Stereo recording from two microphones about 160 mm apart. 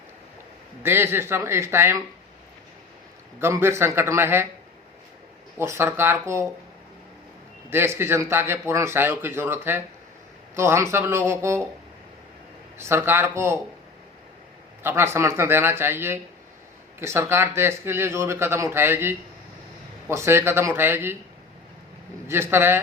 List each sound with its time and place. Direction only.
0.8 s a man's voice: 15° right (ahead or behind)
3.4 s a man's voice: 15° right (ahead or behind)
5.5 s a man's voice: 15° right (ahead or behind)
7.7 s a man's voice: 15° right (ahead or behind)
12.8 s a man's voice: 15° right (ahead or behind)
14.8 s a man's voice: 15° right (ahead or behind)
22.3 s a man's voice: 15° right (ahead or behind)